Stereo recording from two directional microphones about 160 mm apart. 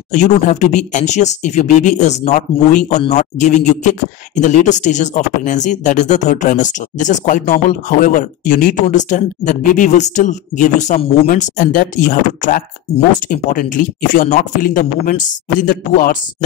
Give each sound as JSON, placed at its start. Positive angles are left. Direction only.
{"t": 0.1, "sound": "a man's voice", "side_deg": 50}